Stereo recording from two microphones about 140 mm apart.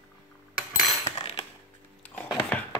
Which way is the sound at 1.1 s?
45° left (ahead or behind).